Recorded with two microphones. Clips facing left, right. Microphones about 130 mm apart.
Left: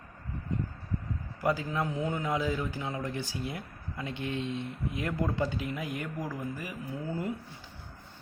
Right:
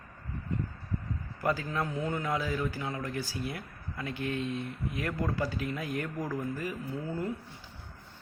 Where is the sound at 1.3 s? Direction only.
15° left (ahead or behind).